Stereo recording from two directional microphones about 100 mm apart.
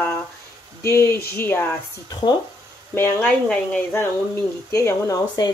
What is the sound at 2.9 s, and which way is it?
Speech, 20° left (ahead or behind).